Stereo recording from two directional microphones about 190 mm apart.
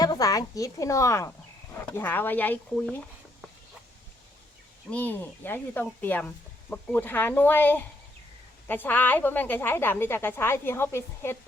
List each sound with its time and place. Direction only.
0.0 s a woman's voice: 20° left (ahead or behind)
4.9 s speech: 10° left (ahead or behind)